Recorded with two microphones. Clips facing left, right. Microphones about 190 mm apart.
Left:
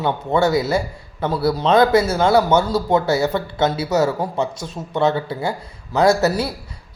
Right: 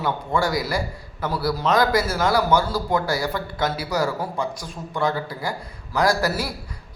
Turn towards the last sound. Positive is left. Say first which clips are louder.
# left 6 dB
turn(degrees=25)  # may be behind; listen again after turning